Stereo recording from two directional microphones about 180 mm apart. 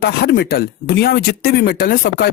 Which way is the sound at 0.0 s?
65° left (ahead or behind).